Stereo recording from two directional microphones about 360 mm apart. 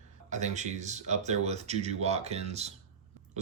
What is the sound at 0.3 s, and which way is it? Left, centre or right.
Speech, centre.